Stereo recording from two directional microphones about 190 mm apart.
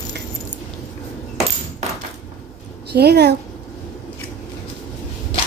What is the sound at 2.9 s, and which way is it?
Speech, 60° right (ahead or behind).